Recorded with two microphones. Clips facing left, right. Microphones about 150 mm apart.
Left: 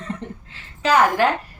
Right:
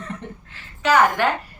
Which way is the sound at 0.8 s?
30° left (ahead or behind).